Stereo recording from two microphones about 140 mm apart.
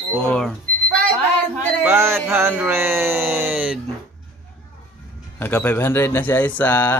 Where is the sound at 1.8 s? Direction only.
15° right (ahead or behind).